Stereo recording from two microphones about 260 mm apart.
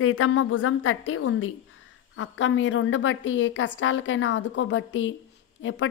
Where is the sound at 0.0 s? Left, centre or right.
Left.